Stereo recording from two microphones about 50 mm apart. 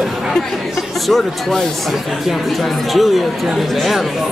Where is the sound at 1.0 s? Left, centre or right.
Centre.